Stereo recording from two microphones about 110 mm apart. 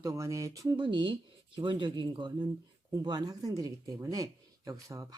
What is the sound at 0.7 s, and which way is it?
Speech, 45° right (ahead or behind).